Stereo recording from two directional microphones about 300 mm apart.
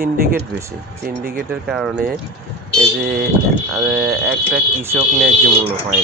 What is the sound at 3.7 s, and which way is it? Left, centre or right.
Speech, centre.